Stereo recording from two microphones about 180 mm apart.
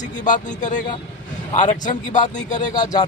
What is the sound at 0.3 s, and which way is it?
A man's voice, 45° left (ahead or behind).